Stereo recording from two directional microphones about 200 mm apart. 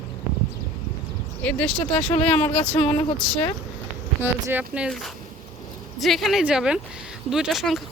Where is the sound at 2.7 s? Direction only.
30° left (ahead or behind).